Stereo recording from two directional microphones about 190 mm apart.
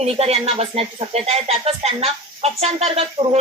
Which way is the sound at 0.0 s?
35° right (ahead or behind).